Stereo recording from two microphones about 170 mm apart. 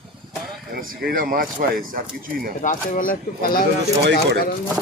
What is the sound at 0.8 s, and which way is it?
Speech, 55° right (ahead or behind).